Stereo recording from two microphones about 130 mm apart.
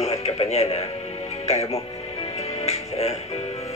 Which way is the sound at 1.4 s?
55° left (ahead or behind).